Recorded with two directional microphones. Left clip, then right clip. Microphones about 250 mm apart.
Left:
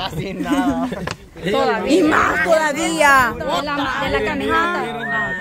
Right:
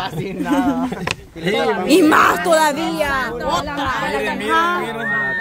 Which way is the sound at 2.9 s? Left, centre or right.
Left.